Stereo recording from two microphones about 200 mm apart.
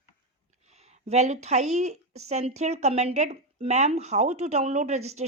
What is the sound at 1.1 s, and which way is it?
A woman's voice, 35° right (ahead or behind).